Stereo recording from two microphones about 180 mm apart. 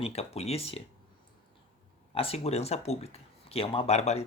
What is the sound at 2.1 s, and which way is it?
Speech, 35° left (ahead or behind).